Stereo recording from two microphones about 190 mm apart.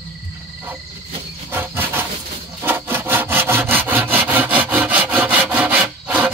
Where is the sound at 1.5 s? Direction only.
10° right (ahead or behind).